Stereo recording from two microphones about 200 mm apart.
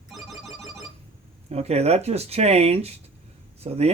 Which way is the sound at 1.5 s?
30° right (ahead or behind).